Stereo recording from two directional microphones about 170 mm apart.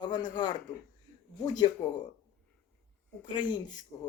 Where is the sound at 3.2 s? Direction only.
25° left (ahead or behind).